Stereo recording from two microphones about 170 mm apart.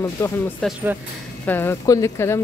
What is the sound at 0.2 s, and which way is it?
Speech, 15° left (ahead or behind).